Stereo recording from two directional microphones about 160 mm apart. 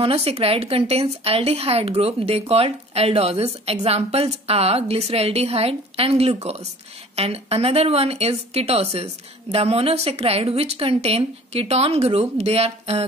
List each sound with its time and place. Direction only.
0.0 s a woman's voice: 40° right (ahead or behind)